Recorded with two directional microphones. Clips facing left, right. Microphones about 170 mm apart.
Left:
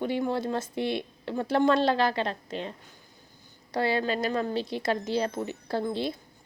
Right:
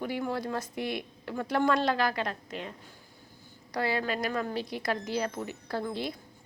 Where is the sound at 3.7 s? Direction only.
30° left (ahead or behind).